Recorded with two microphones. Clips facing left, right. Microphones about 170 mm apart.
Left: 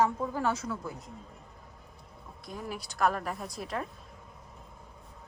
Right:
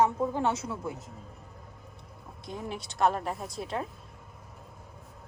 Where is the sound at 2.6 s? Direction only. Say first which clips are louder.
Right 2 dB; 25° right (ahead or behind).